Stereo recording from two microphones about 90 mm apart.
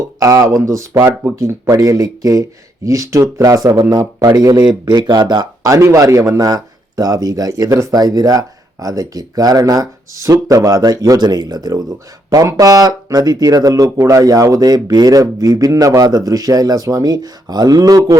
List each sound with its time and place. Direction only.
0.2 s speech: 40° right (ahead or behind)